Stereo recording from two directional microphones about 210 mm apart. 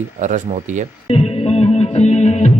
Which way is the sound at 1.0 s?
30° left (ahead or behind).